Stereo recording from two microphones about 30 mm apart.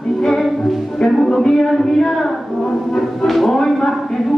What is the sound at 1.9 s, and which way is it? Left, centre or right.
Speech, centre.